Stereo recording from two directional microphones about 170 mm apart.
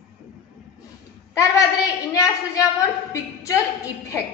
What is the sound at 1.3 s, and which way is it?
A woman's voice, 20° left (ahead or behind).